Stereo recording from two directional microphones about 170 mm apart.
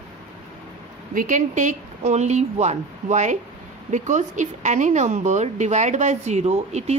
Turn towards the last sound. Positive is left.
turn(degrees=-40)  # may be behind; listen again after turning